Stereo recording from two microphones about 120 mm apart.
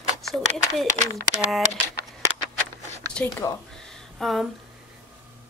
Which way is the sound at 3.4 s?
25° left (ahead or behind).